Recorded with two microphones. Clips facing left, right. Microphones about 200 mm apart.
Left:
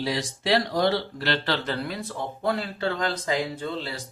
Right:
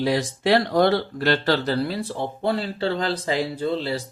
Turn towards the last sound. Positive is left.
turn(degrees=-30)  # may be behind; listen again after turning